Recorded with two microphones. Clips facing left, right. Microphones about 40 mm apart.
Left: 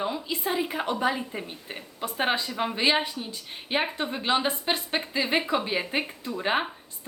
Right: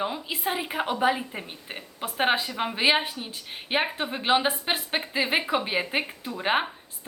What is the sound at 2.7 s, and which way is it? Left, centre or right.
A woman's voice, centre.